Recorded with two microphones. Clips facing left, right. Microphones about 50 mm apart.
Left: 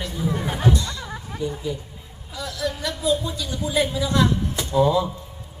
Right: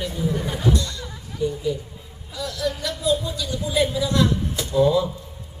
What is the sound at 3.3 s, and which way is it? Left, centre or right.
A woman's voice, centre.